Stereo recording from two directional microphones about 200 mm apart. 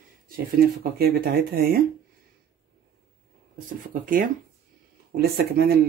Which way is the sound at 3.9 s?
45° right (ahead or behind).